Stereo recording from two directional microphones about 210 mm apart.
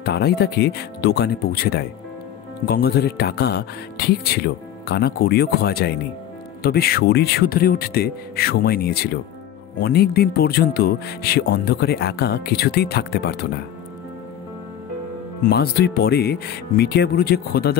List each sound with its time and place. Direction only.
0.0 s speech: 50° left (ahead or behind)
15.4 s speech: 50° left (ahead or behind)